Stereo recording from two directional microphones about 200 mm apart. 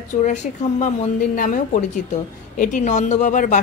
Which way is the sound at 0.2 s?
35° left (ahead or behind).